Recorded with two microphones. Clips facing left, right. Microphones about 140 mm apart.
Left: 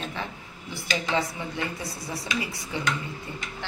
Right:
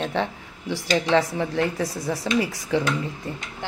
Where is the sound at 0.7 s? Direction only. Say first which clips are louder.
Right 8 dB; 90° right.